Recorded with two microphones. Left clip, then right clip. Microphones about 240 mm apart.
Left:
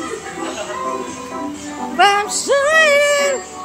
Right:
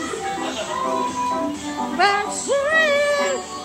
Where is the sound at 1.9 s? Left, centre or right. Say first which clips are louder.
Left 6 dB; centre.